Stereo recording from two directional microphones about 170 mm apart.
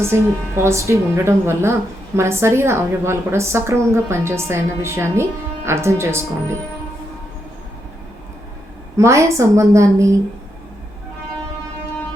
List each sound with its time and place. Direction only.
0.0 s a woman's voice: 15° right (ahead or behind)
9.0 s a woman's voice: 15° right (ahead or behind)